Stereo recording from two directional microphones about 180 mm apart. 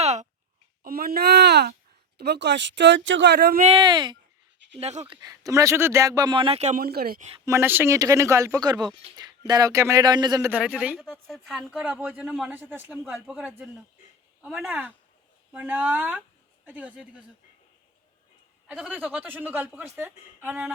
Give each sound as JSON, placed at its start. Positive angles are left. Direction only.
{"t": 0.0, "sound": "a sound", "side_deg": -40}
{"t": 0.8, "sound": "speech", "side_deg": -55}
{"t": 3.6, "sound": "a man's voice", "side_deg": -30}
{"t": 4.8, "sound": "speech", "side_deg": -35}
{"t": 5.1, "sound": "a man's voice", "side_deg": -20}
{"t": 6.7, "sound": "speech", "side_deg": -60}
{"t": 7.4, "sound": "a man's voice", "side_deg": -15}
{"t": 10.5, "sound": "speech", "side_deg": -5}
{"t": 18.7, "sound": "speech", "side_deg": -10}